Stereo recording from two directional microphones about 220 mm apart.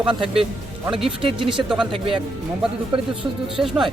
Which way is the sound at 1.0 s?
25° right (ahead or behind).